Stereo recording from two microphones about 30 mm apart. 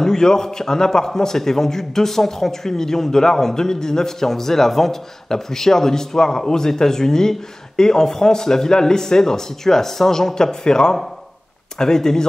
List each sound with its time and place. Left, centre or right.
0.0 s a man's voice: centre